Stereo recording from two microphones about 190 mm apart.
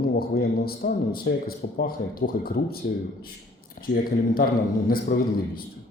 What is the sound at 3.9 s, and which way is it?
Speech, 60° left (ahead or behind).